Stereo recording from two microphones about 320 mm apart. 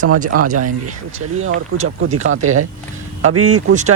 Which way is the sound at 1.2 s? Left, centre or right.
Right.